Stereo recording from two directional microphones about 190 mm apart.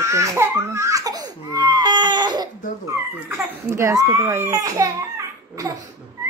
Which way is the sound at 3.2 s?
10° right (ahead or behind).